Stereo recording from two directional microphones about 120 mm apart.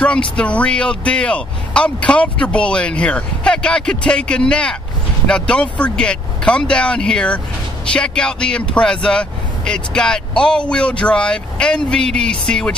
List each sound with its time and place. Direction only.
0.0 s speech: 10° left (ahead or behind)